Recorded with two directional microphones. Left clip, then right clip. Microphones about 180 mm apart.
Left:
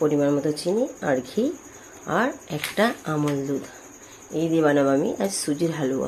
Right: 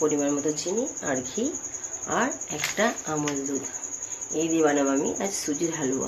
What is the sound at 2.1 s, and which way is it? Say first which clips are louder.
Speech: left 3 dB; 40° left (ahead or behind).